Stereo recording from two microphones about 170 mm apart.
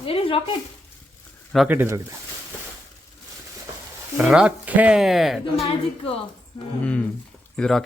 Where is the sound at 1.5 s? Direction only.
Centre (ahead or behind).